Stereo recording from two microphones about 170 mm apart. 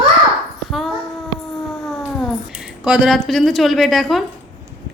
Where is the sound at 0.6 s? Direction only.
Centre (ahead or behind).